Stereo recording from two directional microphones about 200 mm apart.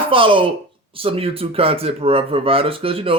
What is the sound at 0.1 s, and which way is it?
Speech, 25° right (ahead or behind).